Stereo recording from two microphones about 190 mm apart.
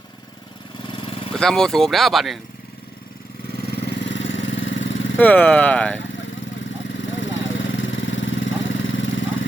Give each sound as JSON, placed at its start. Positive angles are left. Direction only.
{"t": 1.4, "sound": "speech", "side_deg": 0}
{"t": 3.7, "sound": "vehicle", "side_deg": 60}
{"t": 5.1, "sound": "speech", "side_deg": 5}
{"t": 7.2, "sound": "vehicle", "side_deg": 75}